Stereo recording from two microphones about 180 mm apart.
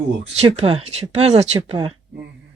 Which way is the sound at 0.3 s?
35° right (ahead or behind).